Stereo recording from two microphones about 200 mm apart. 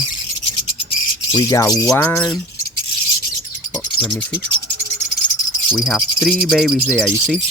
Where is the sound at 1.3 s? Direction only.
15° left (ahead or behind).